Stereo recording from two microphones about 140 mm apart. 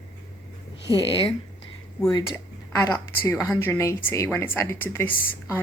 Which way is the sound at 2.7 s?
20° left (ahead or behind).